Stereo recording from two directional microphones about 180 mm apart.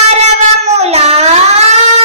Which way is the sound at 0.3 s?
35° right (ahead or behind).